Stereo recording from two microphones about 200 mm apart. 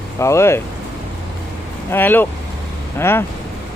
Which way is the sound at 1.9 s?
10° left (ahead or behind).